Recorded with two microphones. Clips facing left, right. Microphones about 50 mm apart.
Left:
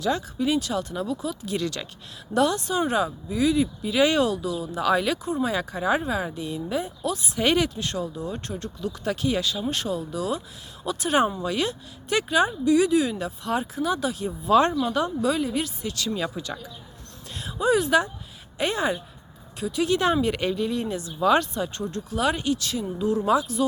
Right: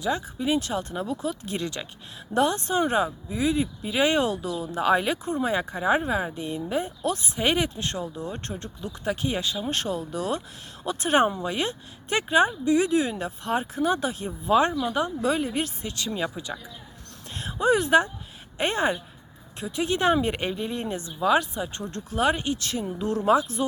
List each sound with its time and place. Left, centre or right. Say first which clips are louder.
0.0 s speech: left 2 dB; right
1.5 s speech: left 3 dB; right
7.3 s speech: left 4 dB; right
9.6 s speech: left 1 dB; right
14.5 s speech: left 2 dB; centre
17.3 s speech: even; right
21.2 s speech: left 2 dB; centre
21.8 s speech: right 2 dB; right